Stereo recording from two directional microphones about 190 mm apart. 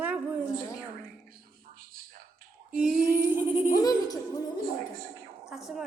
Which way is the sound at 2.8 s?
5° right (ahead or behind).